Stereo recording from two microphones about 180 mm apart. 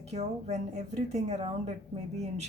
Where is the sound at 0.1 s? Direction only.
40° right (ahead or behind).